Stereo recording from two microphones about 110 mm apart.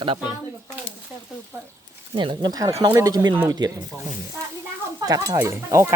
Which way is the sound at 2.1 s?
45° right (ahead or behind).